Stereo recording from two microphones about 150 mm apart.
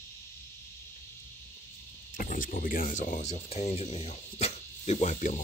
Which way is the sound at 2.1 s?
65° left (ahead or behind).